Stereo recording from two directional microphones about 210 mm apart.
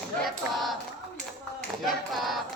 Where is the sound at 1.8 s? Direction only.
Centre (ahead or behind).